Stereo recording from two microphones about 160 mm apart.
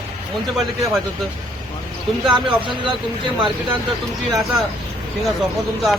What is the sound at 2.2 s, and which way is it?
Speech, 30° right (ahead or behind).